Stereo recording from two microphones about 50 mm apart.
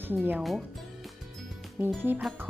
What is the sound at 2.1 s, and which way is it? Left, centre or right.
Speech, right.